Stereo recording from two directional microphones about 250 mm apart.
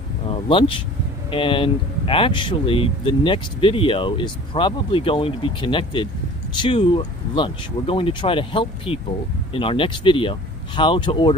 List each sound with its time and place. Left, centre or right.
0.3 s speech: left